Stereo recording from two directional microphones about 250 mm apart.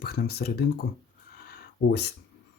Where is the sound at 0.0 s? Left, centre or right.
Left.